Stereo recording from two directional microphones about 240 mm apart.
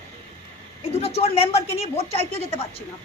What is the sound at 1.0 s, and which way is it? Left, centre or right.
A woman's voice, left.